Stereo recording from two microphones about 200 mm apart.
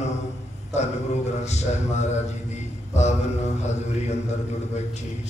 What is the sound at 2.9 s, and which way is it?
Mantra, 35° left (ahead or behind).